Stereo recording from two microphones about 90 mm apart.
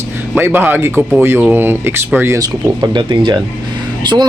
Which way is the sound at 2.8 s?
55° right (ahead or behind).